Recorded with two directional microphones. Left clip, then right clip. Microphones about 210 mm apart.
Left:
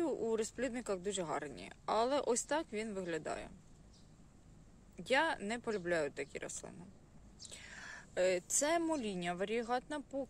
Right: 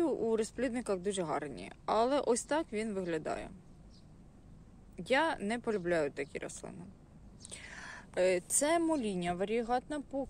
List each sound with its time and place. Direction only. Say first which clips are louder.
0.0 s speech: right 4 dB; centre (ahead or behind)
4.9 s a woman's voice: right 3 dB; centre (ahead or behind)